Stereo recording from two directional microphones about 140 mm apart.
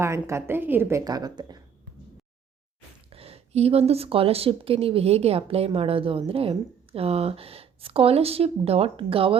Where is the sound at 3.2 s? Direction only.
45° right (ahead or behind).